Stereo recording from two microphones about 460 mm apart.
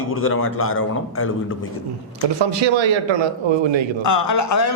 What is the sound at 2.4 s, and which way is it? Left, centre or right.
A man's voice, right.